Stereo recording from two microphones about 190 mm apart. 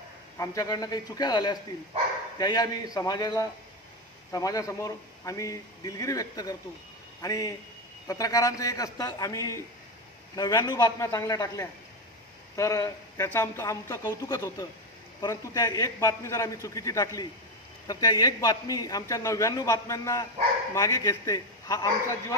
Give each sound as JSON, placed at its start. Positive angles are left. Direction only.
{"t": 0.4, "sound": "a man's voice", "side_deg": 20}